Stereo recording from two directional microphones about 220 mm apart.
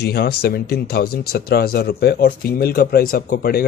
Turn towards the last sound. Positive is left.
turn(degrees=40)  # may be behind; listen again after turning